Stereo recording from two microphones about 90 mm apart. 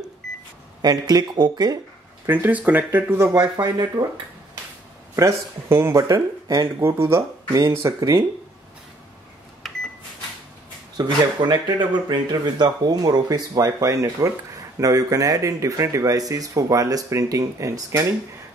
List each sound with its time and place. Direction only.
0.2 s cash register: 5° left (ahead or behind)
0.8 s speech: 45° right (ahead or behind)
2.2 s speech: 20° right (ahead or behind)
4.0 s speech: 55° right (ahead or behind)
5.1 s speech: 30° right (ahead or behind)
6.0 s speech: 40° right (ahead or behind)
9.6 s microwave oven: centre (ahead or behind)
11.0 s speech: 55° right (ahead or behind); by 18.0 s 35° right (ahead or behind)